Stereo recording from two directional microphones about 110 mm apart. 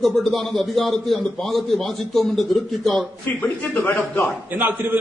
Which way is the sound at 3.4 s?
15° left (ahead or behind).